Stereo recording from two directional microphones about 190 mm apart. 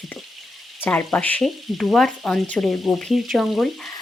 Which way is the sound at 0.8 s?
10° left (ahead or behind).